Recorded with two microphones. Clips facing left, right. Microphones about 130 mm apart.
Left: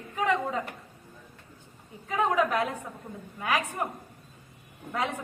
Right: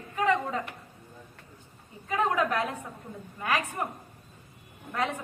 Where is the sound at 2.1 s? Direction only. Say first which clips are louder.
Left 1 dB; 15° left (ahead or behind).